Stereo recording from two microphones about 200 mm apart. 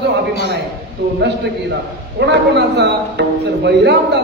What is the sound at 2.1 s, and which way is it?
A man's voice, 60° right (ahead or behind).